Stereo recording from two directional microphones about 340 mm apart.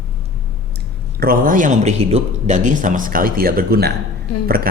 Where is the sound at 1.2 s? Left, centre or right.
Right.